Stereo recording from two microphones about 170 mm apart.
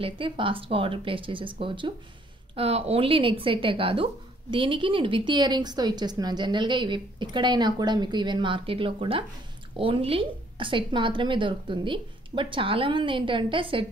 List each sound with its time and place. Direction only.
0.0 s speech: 30° right (ahead or behind)